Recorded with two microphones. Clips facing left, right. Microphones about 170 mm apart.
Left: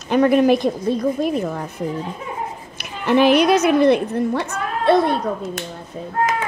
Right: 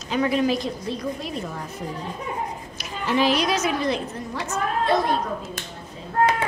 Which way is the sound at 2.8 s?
60° left (ahead or behind).